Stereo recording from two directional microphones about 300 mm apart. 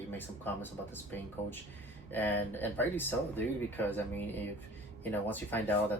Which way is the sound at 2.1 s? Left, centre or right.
Centre.